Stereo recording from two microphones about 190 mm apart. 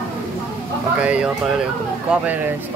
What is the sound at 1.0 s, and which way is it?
Speech, 5° right (ahead or behind).